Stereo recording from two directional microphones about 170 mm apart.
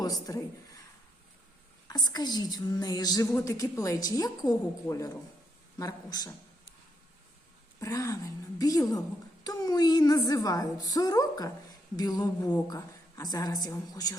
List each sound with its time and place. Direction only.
0.0 s speech: 20° left (ahead or behind)
1.9 s a woman's voice: 25° left (ahead or behind)
7.8 s a woman's voice: 20° left (ahead or behind)